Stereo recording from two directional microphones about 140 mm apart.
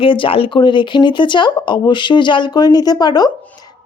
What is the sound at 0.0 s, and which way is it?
Speech, 40° left (ahead or behind).